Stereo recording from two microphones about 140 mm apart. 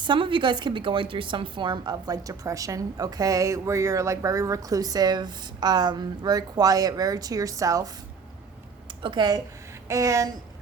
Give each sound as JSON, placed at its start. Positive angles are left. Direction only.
{"t": 0.0, "sound": "a woman's voice", "side_deg": -35}
{"t": 9.0, "sound": "a woman's voice", "side_deg": -35}